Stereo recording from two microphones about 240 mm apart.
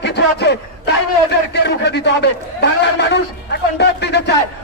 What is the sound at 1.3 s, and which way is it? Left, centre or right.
A man's voice, left.